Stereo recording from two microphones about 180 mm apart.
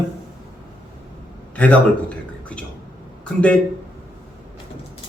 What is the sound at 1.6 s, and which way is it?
Speech, 5° left (ahead or behind).